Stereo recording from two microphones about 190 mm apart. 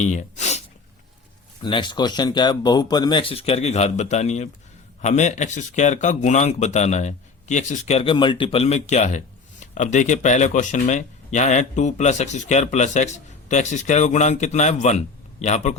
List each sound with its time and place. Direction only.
0.0 s sneeze: 40° left (ahead or behind)
1.6 s speech: 25° left (ahead or behind)